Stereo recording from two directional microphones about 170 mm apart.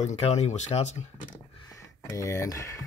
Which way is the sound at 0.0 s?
40° left (ahead or behind).